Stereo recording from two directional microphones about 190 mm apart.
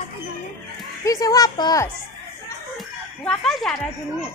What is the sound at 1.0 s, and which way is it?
Speech, 20° left (ahead or behind).